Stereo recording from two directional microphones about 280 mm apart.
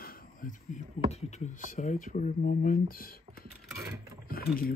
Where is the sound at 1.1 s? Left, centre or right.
Left.